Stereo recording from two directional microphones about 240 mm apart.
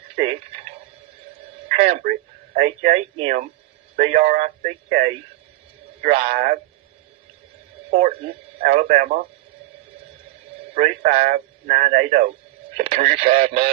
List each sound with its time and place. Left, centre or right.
1.8 s a man's voice: right
7.9 s a man's voice: right
10.8 s a man's voice: right
12.7 s radio: right
13.1 s speech: right